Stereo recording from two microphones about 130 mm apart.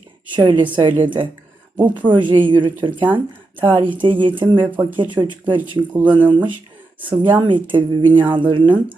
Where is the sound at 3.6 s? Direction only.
35° right (ahead or behind).